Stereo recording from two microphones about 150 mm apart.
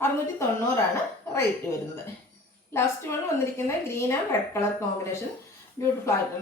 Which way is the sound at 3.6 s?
15° left (ahead or behind).